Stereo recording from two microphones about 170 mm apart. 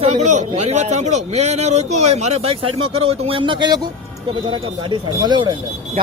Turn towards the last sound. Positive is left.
turn(degrees=-25)  # may be behind; listen again after turning